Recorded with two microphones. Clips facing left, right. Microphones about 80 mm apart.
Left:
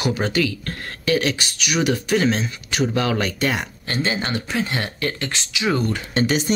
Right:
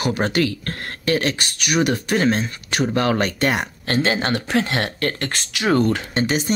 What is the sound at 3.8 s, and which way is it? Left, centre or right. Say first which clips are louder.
Speech: right 5 dB; right.